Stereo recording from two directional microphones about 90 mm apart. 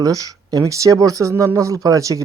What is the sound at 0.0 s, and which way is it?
Speech, 45° right (ahead or behind).